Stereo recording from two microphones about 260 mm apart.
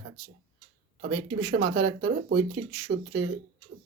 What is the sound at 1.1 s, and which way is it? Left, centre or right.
A man's voice, right.